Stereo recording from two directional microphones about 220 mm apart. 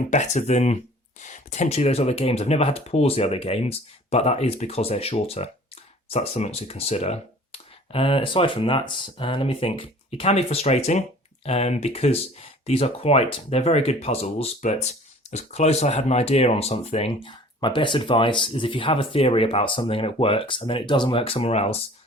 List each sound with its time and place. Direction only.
0.1 s speech: 30° left (ahead or behind)